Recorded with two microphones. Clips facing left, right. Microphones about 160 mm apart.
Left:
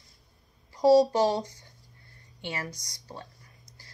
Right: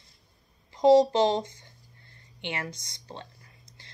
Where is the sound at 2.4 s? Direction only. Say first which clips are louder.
Right 1 dB; 25° right (ahead or behind).